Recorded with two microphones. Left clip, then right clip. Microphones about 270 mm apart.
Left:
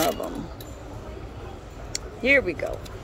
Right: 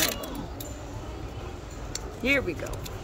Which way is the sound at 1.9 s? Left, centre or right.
Centre.